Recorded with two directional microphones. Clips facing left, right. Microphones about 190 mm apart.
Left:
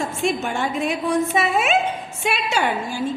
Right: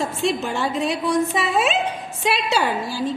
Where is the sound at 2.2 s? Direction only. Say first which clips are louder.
Right 1 dB; 35° right (ahead or behind).